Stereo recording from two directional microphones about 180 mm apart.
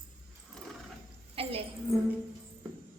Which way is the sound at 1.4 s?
30° right (ahead or behind).